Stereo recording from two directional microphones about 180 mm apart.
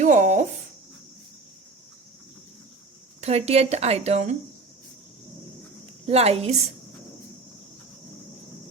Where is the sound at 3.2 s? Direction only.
35° right (ahead or behind).